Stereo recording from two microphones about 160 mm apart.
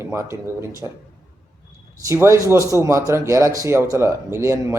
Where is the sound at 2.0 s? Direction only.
20° right (ahead or behind).